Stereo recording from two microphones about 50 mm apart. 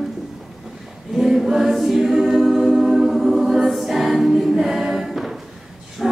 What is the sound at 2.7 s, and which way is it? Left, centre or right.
A capella, centre.